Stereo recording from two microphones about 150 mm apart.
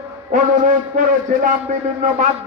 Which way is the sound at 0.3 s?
60° right (ahead or behind).